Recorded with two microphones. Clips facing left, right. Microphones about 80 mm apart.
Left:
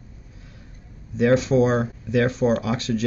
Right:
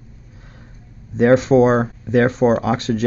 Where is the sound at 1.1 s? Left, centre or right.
Right.